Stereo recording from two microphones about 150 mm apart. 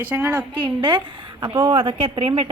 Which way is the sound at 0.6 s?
35° right (ahead or behind).